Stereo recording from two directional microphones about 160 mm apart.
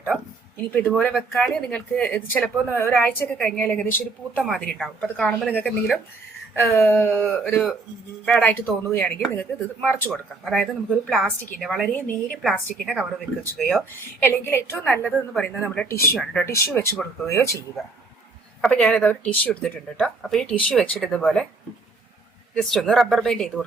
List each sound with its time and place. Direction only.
0.7 s speech: 5° left (ahead or behind)
14.2 s speech: 15° left (ahead or behind)
15.9 s speech: 15° left (ahead or behind)
16.1 s speech: 5° left (ahead or behind)
18.6 s speech: 5° left (ahead or behind)
22.5 s speech: 5° left (ahead or behind)